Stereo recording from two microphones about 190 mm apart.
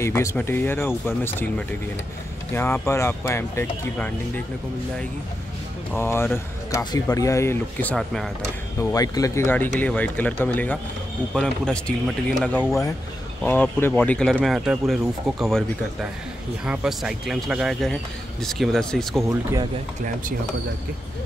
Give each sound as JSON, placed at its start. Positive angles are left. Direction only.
{"t": 0.0, "sound": "speech", "side_deg": 15}
{"t": 5.9, "sound": "speech", "side_deg": 15}
{"t": 8.9, "sound": "speech", "side_deg": 20}
{"t": 19.2, "sound": "speech", "side_deg": -15}